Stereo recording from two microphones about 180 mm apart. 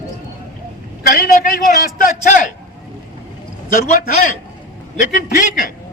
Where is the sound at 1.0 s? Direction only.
55° left (ahead or behind).